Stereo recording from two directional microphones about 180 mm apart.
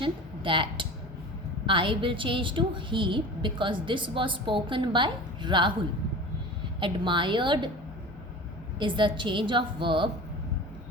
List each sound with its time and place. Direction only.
0.0 s a sound: 30° right (ahead or behind)
1.6 s a woman's voice: 30° right (ahead or behind)
6.7 s a woman's voice: 25° right (ahead or behind)
8.8 s a woman's voice: 25° right (ahead or behind)